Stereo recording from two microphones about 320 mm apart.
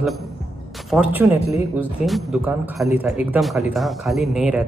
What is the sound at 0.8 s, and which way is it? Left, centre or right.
Speech, centre.